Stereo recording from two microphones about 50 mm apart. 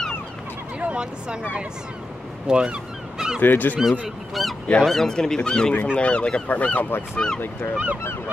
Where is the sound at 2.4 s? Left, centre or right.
Centre.